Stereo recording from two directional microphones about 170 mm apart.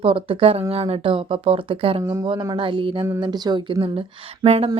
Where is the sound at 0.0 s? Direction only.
35° right (ahead or behind).